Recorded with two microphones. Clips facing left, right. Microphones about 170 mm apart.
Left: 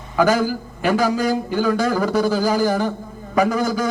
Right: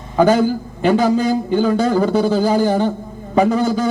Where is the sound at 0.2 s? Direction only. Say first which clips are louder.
Right 4 dB; 30° right (ahead or behind).